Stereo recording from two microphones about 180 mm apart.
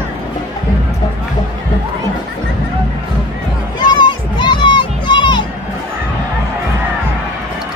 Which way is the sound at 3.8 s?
25° left (ahead or behind).